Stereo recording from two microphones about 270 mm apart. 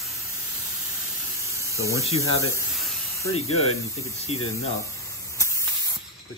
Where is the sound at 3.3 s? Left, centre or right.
Left.